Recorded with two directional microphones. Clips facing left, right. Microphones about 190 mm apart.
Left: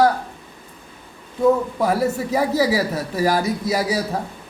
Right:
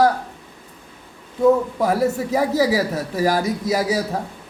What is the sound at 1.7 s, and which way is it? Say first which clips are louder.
A man's voice: right 1 dB; 45° right (ahead or behind).